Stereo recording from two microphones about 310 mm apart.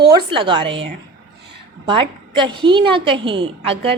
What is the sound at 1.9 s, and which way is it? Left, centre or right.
A woman's voice, centre.